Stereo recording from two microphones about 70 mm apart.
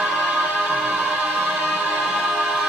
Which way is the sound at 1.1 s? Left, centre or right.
Right.